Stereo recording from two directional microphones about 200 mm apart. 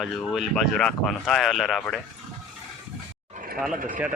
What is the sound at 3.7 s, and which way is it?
Speech, 40° right (ahead or behind).